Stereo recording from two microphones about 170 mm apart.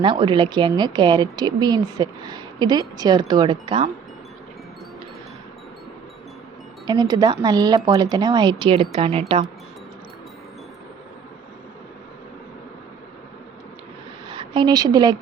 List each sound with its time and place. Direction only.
0.0 s a woman's voice: 30° right (ahead or behind)
6.8 s a woman's voice: 25° right (ahead or behind)
14.3 s a woman's voice: 30° right (ahead or behind)